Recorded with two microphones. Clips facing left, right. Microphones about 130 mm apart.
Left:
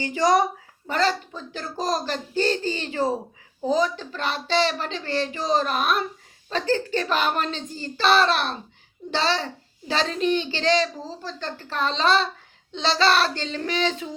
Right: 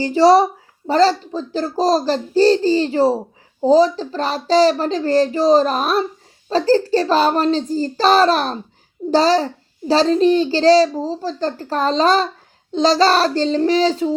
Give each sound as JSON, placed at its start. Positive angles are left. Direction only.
{"t": 0.0, "sound": "a child's voice", "side_deg": -30}